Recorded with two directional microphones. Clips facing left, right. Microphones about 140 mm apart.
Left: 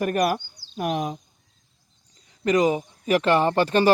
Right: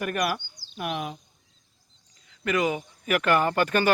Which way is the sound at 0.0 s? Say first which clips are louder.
Left 5 dB; 35° left (ahead or behind).